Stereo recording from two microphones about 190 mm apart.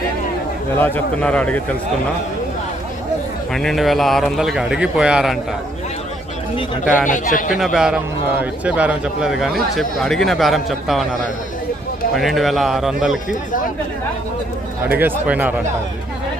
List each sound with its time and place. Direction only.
0.7 s speech: 10° left (ahead or behind)
3.5 s a man's voice: centre (ahead or behind)
7.1 s a man's voice: 45° left (ahead or behind)
7.5 s a man's voice: centre (ahead or behind)
12.2 s a man's voice: centre (ahead or behind)
14.9 s speech: 10° right (ahead or behind)